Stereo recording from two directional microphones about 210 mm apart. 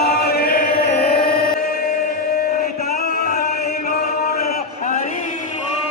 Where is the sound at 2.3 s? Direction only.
45° left (ahead or behind).